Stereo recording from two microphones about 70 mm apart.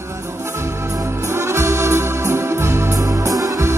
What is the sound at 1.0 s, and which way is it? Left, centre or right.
Music, right.